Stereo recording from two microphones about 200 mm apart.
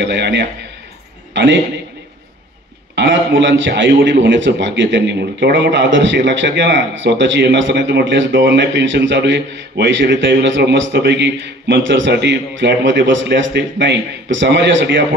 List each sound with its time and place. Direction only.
0.0 s a man's voice: 60° right (ahead or behind)
3.0 s a man's voice: 65° right (ahead or behind)